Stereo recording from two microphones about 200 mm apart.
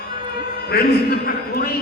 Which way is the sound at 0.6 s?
50° left (ahead or behind).